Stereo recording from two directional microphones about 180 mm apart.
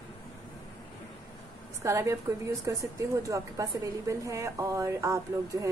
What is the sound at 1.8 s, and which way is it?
A woman's voice, 15° right (ahead or behind).